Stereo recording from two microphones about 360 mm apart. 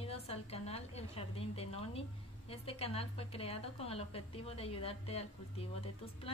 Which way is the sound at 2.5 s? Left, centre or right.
Centre.